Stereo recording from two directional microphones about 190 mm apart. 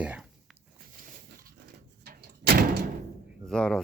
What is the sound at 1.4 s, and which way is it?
Door, 55° right (ahead or behind).